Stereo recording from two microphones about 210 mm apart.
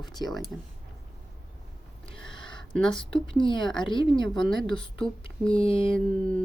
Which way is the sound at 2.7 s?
5° left (ahead or behind).